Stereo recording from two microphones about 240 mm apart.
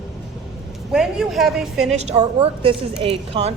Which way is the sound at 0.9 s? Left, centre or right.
Centre.